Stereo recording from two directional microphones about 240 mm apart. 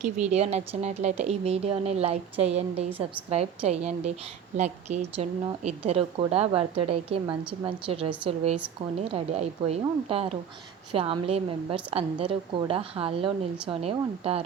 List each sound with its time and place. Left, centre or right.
0.0 s a woman's voice: right